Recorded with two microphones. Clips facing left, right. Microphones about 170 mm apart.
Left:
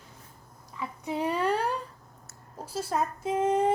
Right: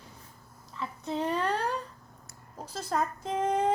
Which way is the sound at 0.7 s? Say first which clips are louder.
Left 1 dB; 10° left (ahead or behind).